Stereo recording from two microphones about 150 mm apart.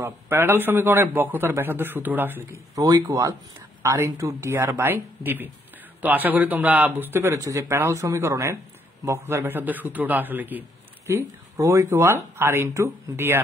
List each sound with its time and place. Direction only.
0.0 s a man's voice: 15° right (ahead or behind)